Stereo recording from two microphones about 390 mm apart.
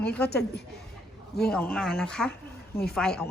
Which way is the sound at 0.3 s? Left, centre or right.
Left.